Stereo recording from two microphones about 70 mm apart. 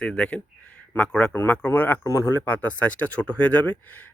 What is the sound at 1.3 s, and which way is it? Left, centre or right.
Speech, left.